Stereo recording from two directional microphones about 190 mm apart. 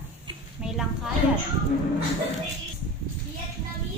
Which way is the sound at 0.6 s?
5° right (ahead or behind).